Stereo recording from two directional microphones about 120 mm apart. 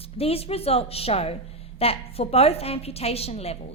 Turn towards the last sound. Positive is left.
turn(degrees=60)  # may be behind; listen again after turning